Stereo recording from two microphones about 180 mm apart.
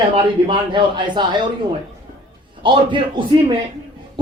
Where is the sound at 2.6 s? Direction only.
25° right (ahead or behind).